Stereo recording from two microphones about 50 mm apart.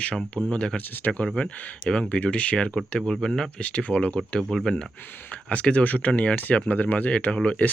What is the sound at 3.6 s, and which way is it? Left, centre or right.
Speech, left.